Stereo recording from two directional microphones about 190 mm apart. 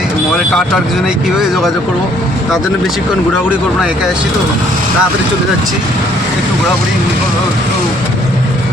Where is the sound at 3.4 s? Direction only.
Centre (ahead or behind).